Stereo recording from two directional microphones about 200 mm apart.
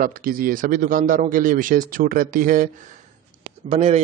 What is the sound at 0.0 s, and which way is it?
Speech, 45° right (ahead or behind).